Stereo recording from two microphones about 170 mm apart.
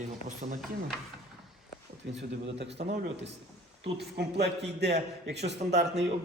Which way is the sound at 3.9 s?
75° right (ahead or behind).